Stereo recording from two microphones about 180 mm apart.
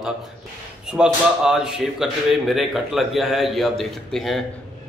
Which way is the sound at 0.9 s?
5° right (ahead or behind).